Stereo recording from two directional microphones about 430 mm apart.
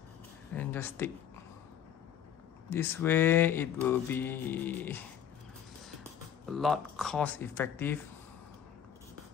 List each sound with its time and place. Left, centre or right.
0.6 s speech: centre
2.7 s speech: centre
6.5 s speech: centre